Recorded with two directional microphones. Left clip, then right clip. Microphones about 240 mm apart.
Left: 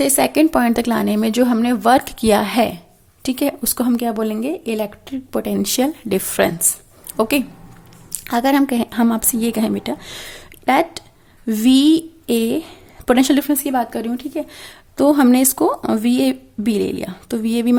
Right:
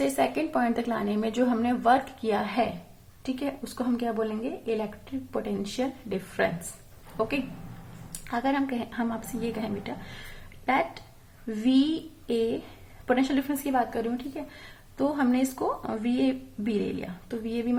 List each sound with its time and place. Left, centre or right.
0.0 s a woman's voice: left